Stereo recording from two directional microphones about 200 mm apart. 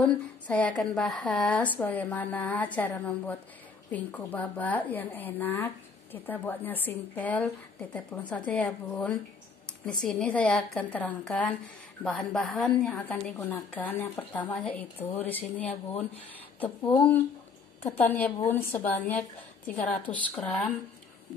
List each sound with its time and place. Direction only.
0.0 s a woman's voice: 5° left (ahead or behind)
16.8 s a woman's voice: 10° left (ahead or behind)